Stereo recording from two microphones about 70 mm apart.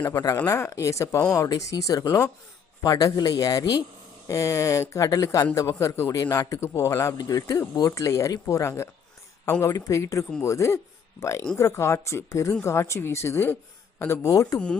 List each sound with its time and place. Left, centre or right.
0.0 s speech: left
0.7 s a man's voice: left
1.4 s a man's voice: left
4.3 s a man's voice: left
9.7 s a man's voice: left
14.3 s a man's voice: left